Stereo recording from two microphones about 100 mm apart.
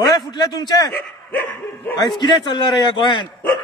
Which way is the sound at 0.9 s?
20° left (ahead or behind).